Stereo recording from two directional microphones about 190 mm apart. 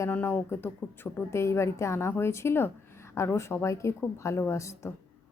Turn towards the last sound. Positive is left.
turn(degrees=15)  # may be behind; listen again after turning